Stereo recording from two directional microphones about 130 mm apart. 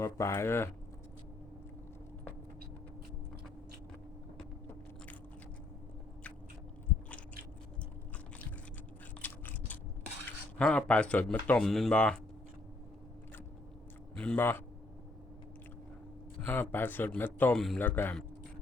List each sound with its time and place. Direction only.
0.0 s speech: 20° left (ahead or behind)
9.2 s biting: 10° left (ahead or behind)
10.6 s speech: 10° left (ahead or behind)
14.2 s speech: 15° left (ahead or behind)
16.5 s speech: 15° left (ahead or behind)